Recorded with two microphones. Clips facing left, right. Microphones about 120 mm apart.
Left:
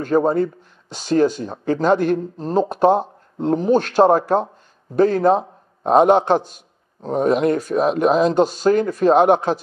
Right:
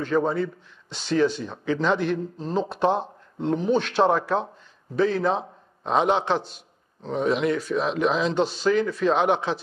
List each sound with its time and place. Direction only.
0.0 s a man's voice: 45° left (ahead or behind)